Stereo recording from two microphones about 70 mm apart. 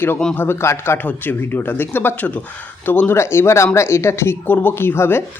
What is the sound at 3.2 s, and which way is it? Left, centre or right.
Speech, left.